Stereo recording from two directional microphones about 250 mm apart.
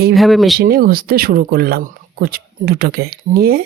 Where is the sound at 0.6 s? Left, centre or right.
Right.